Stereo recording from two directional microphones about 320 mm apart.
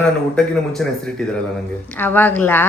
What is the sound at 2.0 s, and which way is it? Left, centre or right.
Speech, centre.